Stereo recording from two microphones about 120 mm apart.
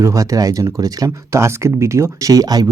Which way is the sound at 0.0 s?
25° right (ahead or behind).